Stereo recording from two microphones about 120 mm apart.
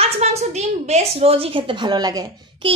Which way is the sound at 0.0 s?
65° right (ahead or behind).